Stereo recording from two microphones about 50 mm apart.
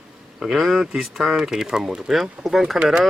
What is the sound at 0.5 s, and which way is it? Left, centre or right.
Speech, centre.